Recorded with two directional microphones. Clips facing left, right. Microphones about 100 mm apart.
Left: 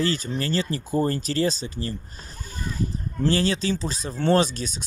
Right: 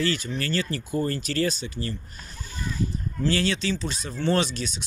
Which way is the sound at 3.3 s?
35° left (ahead or behind).